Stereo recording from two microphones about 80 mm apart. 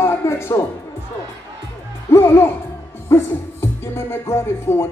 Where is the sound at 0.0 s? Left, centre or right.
Left.